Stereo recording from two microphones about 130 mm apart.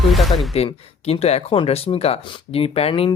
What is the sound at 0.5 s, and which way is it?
Speech, 50° left (ahead or behind).